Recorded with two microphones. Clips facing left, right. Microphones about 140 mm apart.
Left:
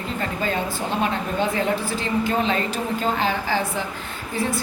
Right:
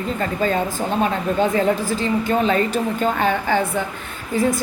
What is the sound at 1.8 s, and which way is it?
A woman's voice, 45° right (ahead or behind).